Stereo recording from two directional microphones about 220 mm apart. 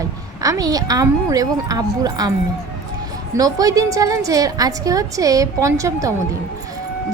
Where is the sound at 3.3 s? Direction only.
15° right (ahead or behind).